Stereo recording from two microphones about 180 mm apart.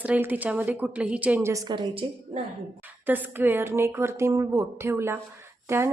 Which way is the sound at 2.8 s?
10° right (ahead or behind).